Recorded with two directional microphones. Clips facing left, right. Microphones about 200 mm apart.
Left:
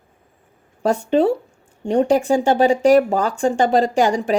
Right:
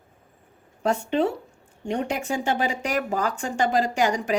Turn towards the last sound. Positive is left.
turn(degrees=30)  # may be behind; listen again after turning